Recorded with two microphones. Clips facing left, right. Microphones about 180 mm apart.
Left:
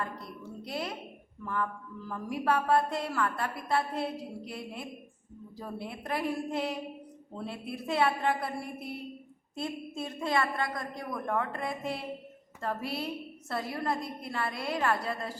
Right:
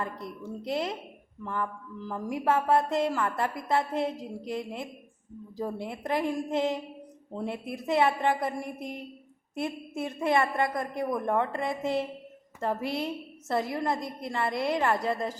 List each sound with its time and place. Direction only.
0.0 s a woman's voice: 20° right (ahead or behind)
2.0 s a woman's voice: 20° right (ahead or behind)